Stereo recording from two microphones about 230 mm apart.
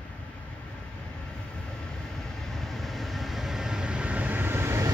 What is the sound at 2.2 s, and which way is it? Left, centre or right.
Vehicle, centre.